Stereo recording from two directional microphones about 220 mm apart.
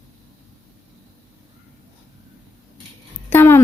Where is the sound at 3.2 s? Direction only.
10° left (ahead or behind).